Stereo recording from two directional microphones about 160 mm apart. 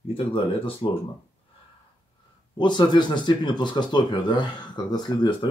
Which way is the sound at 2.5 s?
30° left (ahead or behind).